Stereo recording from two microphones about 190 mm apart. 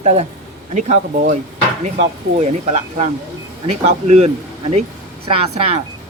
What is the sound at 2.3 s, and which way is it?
Speech, 35° right (ahead or behind).